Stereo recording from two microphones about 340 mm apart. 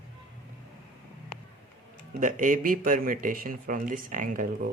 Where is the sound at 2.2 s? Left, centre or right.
Right.